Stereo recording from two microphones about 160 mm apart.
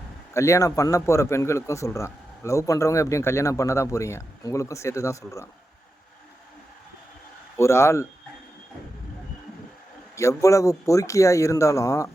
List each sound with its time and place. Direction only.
0.3 s speech: 20° left (ahead or behind)
7.5 s a man's voice: 15° left (ahead or behind)
10.2 s speech: 20° left (ahead or behind)